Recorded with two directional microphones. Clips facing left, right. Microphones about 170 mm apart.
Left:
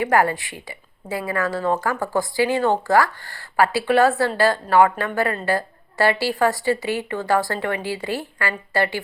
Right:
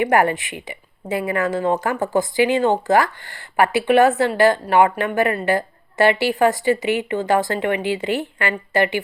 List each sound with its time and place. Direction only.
0.0 s a woman's voice: 20° right (ahead or behind)